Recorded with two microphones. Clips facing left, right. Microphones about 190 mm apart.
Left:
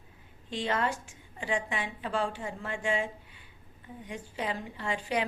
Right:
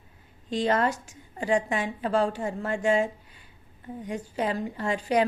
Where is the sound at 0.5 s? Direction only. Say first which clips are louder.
Right 6 dB; 40° right (ahead or behind).